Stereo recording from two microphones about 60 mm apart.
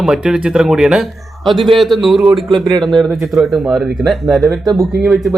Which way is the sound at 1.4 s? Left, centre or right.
Centre.